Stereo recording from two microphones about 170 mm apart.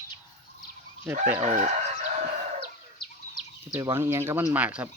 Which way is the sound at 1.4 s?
40° right (ahead or behind).